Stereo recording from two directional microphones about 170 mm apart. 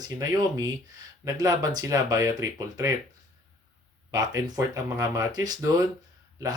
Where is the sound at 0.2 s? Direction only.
20° right (ahead or behind).